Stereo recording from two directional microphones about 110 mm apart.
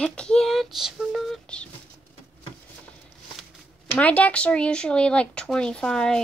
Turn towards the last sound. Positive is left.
turn(degrees=5)  # may be behind; listen again after turning